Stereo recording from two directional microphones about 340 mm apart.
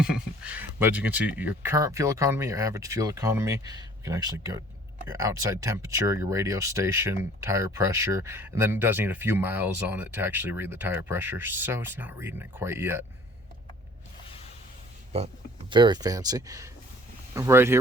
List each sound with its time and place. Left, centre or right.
0.0 s speech: centre
15.1 s speech: centre